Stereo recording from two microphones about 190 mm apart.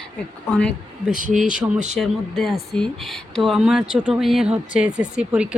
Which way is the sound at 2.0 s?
Centre (ahead or behind).